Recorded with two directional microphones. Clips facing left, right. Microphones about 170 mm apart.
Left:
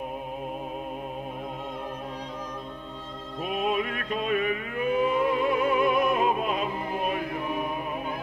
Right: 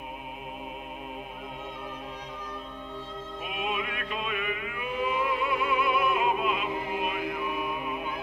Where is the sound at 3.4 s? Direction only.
40° left (ahead or behind).